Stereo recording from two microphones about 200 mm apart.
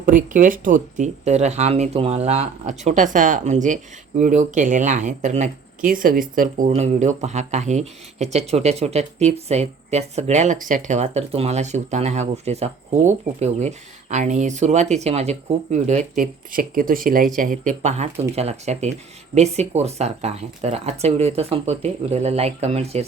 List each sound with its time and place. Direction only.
0.0 s speech: 40° right (ahead or behind)